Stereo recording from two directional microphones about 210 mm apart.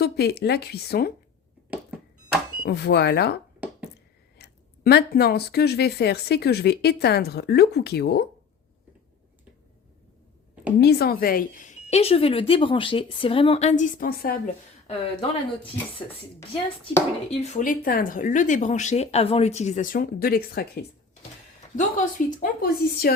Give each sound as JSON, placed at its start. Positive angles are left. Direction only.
{"t": 0.0, "sound": "speech", "side_deg": 50}
{"t": 2.6, "sound": "speech", "side_deg": 50}
{"t": 10.8, "sound": "speech", "side_deg": 50}
{"t": 14.8, "sound": "speech", "side_deg": 25}
{"t": 17.3, "sound": "speech", "side_deg": 35}
{"t": 21.8, "sound": "speech", "side_deg": 40}